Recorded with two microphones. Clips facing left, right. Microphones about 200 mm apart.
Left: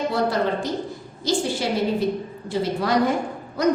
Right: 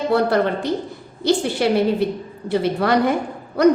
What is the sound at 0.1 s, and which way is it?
A woman's voice, 60° right (ahead or behind).